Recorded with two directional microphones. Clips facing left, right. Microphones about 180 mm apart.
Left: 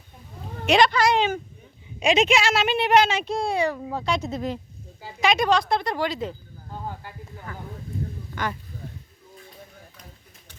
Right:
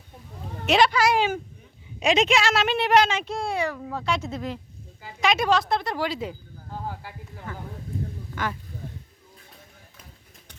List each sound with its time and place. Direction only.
0.6 s a woman's voice: 5° right (ahead or behind)
3.3 s speech: 35° left (ahead or behind)
3.8 s speech: 15° left (ahead or behind)
5.2 s a woman's voice: 5° right (ahead or behind)